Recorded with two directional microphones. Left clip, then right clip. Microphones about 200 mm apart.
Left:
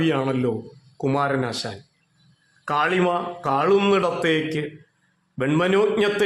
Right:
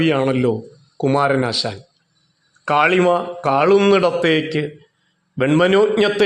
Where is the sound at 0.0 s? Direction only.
15° right (ahead or behind).